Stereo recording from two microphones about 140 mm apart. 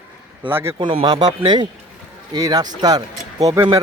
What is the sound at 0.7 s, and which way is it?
Speech, 35° right (ahead or behind).